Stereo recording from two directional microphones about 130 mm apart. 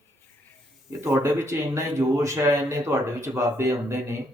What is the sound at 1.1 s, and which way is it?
Speech, 20° right (ahead or behind).